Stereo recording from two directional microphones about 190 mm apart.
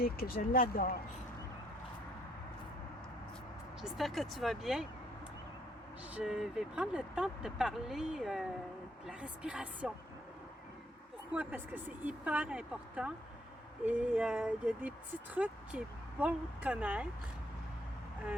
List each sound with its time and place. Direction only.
0.0 s speech: 50° left (ahead or behind)
3.9 s speech: centre (ahead or behind)
6.1 s speech: 5° right (ahead or behind)
11.3 s speech: 10° right (ahead or behind)